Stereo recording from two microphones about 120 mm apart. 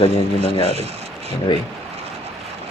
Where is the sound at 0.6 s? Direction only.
60° right (ahead or behind).